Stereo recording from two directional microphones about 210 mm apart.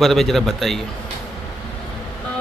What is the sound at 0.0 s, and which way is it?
Speech, centre (ahead or behind).